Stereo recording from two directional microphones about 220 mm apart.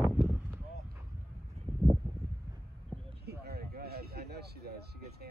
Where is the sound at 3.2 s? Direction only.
45° right (ahead or behind).